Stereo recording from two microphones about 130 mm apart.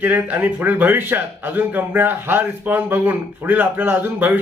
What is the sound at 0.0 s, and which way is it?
A man's voice, 10° right (ahead or behind).